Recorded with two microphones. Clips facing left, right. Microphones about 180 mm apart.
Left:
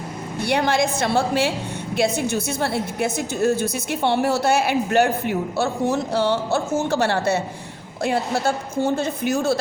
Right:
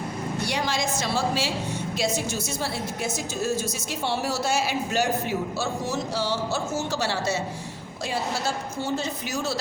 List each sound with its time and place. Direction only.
0.4 s a woman's voice: 60° left (ahead or behind)